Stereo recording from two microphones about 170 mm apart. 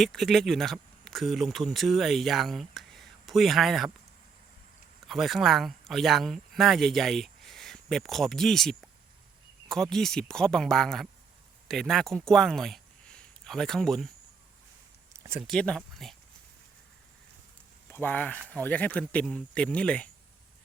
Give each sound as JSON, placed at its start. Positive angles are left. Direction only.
{"t": 0.0, "sound": "speech", "side_deg": 0}
{"t": 5.0, "sound": "speech", "side_deg": 0}
{"t": 15.1, "sound": "a sound", "side_deg": -15}
{"t": 15.4, "sound": "speech", "side_deg": 5}
{"t": 17.8, "sound": "speech", "side_deg": 10}